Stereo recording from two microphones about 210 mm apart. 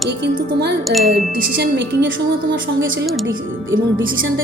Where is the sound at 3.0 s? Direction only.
Centre (ahead or behind).